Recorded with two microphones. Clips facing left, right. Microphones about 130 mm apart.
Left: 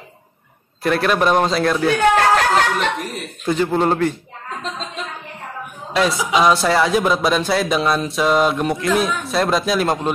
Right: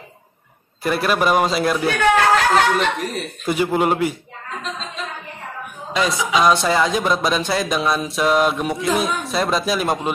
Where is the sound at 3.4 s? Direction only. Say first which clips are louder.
Left 1 dB; 10° right (ahead or behind).